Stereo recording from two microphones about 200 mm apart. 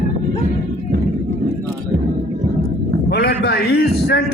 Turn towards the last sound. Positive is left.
turn(degrees=50)  # may be behind; listen again after turning